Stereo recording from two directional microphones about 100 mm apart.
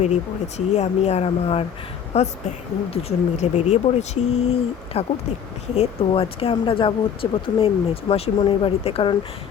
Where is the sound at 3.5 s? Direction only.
90° left.